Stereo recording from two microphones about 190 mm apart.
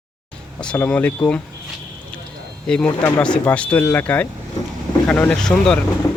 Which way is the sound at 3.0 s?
15° left (ahead or behind).